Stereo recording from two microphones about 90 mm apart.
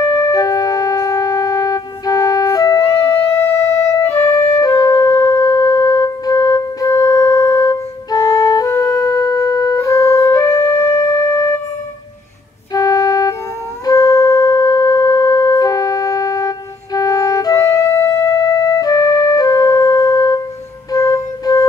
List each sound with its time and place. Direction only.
0.3 s music: 45° left (ahead or behind)
3.4 s music: 30° left (ahead or behind)
12.7 s organ: 40° left (ahead or behind)
13.8 s wind instrument: 40° left (ahead or behind)
17.6 s music: 30° left (ahead or behind)